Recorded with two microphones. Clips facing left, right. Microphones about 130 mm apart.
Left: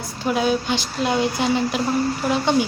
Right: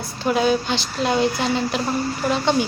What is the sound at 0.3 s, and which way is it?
Speech, 10° left (ahead or behind).